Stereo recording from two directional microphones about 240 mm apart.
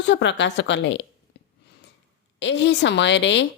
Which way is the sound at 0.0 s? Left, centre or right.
Left.